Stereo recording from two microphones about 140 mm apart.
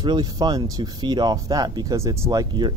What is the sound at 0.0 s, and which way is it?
Speech, 30° right (ahead or behind).